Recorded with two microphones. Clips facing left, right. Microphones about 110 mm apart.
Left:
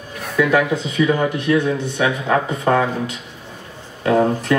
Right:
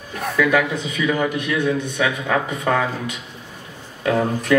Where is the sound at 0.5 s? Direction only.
30° left (ahead or behind).